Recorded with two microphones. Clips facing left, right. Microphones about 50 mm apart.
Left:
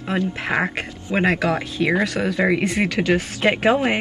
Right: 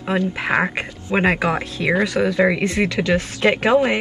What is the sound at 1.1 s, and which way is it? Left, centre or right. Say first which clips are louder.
Speech: right 1 dB; right.